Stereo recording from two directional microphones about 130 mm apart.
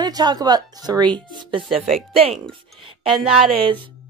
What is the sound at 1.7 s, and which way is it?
Speech, centre (ahead or behind).